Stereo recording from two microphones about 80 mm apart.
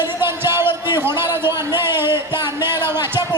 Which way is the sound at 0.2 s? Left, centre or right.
Right.